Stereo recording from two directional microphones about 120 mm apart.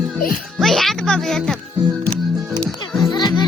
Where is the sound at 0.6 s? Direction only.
Centre (ahead or behind).